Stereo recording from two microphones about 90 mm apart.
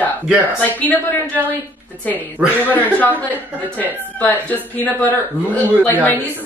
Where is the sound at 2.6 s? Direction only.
20° left (ahead or behind).